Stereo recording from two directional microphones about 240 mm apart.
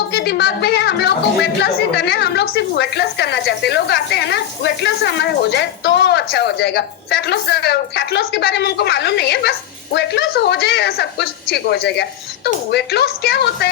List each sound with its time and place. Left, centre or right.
0.1 s speech: left